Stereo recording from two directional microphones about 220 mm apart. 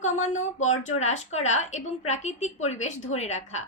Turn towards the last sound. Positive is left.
turn(degrees=30)  # may be behind; listen again after turning